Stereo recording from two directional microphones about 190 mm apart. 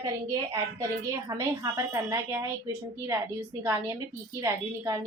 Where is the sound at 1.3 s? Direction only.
20° right (ahead or behind).